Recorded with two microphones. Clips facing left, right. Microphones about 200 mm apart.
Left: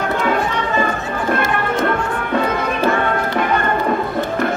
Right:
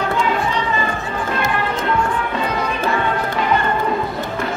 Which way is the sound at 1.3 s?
50° left (ahead or behind).